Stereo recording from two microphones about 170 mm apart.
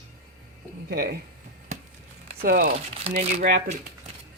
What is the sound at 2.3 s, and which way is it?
Speech, 55° right (ahead or behind).